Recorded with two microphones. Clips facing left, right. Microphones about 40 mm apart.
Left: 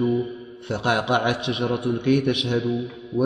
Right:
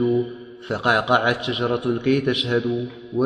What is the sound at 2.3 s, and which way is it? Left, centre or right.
Speech, right.